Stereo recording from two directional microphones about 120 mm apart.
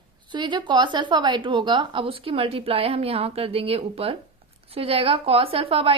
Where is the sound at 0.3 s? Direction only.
40° right (ahead or behind).